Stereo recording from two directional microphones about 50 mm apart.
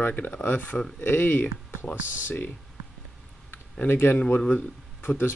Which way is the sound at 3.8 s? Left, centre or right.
Left.